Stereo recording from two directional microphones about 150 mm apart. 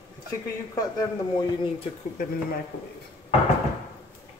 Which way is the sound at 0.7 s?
25° left (ahead or behind).